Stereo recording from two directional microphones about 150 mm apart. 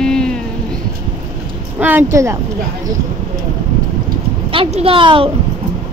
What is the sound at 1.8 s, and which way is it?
Speech, 15° right (ahead or behind).